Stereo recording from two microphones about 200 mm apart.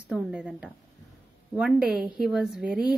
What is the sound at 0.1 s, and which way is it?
Speech, 5° right (ahead or behind).